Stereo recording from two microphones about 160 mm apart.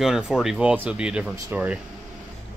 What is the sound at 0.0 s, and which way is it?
Speech, centre (ahead or behind).